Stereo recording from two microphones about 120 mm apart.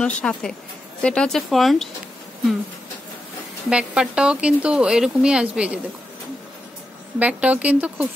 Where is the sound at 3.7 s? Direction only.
10° right (ahead or behind).